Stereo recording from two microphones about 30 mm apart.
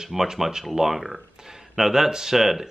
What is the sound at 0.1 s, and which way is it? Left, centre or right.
Speech, centre.